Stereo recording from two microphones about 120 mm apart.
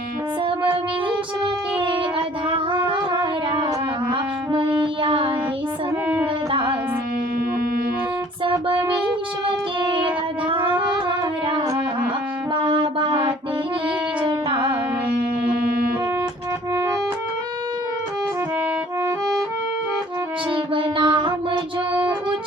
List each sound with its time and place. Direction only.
1.8 s a sound: 45° right (ahead or behind)
4.1 s music: 45° right (ahead or behind)
6.5 s music: 45° right (ahead or behind)
8.4 s music: 45° right (ahead or behind)
11.4 s music: 30° right (ahead or behind)
12.6 s music: 45° right (ahead or behind)
20.7 s music: 45° right (ahead or behind)